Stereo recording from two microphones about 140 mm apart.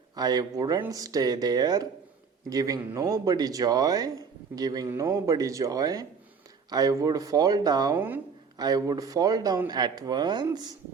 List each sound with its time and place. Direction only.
0.2 s speech: 30° right (ahead or behind)
7.9 s speech: 15° right (ahead or behind)
8.5 s speech: 30° right (ahead or behind)